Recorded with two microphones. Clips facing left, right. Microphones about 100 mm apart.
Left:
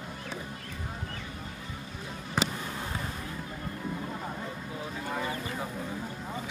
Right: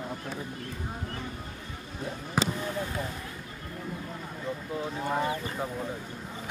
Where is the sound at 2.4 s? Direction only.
5° right (ahead or behind).